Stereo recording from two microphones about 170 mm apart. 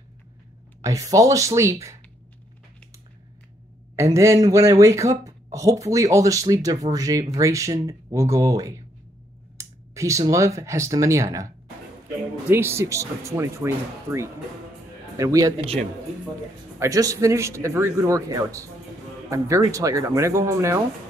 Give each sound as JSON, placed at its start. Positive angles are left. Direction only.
{"t": 0.8, "sound": "speech", "side_deg": -20}
{"t": 3.9, "sound": "speech", "side_deg": -15}
{"t": 16.8, "sound": "speech", "side_deg": -20}